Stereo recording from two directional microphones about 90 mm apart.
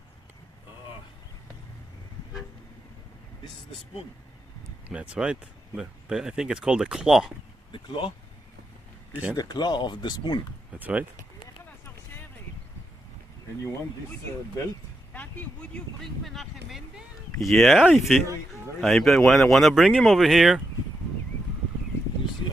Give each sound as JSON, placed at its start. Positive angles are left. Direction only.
{"t": 4.9, "sound": "speech", "side_deg": -10}
{"t": 7.7, "sound": "speech", "side_deg": 65}
{"t": 9.3, "sound": "speech", "side_deg": 50}
{"t": 10.7, "sound": "a sound", "side_deg": -15}
{"t": 15.1, "sound": "speech", "side_deg": 20}
{"t": 16.0, "sound": "speech", "side_deg": 0}